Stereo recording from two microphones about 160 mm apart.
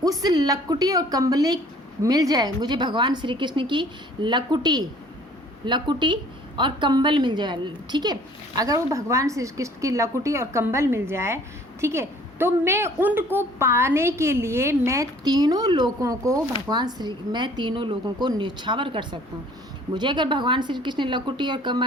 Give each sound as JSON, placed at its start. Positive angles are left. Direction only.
{"t": 0.0, "sound": "a woman's voice", "side_deg": -25}